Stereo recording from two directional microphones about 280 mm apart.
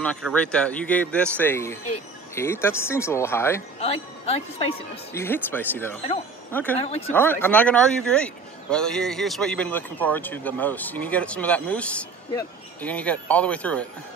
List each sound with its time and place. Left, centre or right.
0.0 s speech: centre
3.8 s speech: left
5.1 s speech: centre